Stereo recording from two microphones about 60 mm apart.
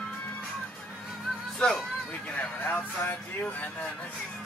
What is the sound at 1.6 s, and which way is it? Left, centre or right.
Hubbub, centre.